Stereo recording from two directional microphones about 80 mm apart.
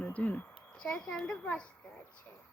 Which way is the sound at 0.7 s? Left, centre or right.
Centre.